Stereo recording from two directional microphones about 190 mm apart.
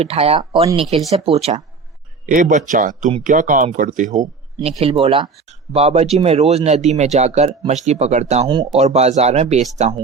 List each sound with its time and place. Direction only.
0.0 s speech: 30° right (ahead or behind)
2.2 s speech: 45° right (ahead or behind)
4.8 s speech: 30° right (ahead or behind)